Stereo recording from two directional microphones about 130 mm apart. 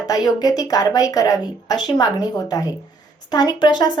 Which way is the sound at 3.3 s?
30° left (ahead or behind).